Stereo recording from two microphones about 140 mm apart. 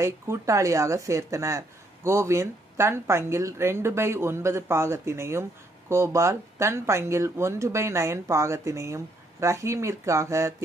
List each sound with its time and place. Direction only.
0.0 s a woman's voice: 20° right (ahead or behind)